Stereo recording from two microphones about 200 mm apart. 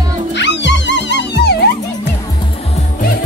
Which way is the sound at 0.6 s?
60° left (ahead or behind).